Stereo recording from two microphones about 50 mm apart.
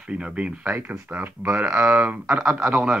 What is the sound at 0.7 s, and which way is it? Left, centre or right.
Speech, right.